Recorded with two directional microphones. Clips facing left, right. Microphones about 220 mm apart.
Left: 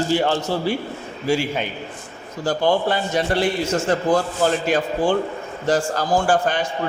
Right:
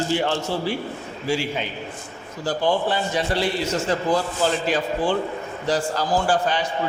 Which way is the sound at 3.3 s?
50° left (ahead or behind).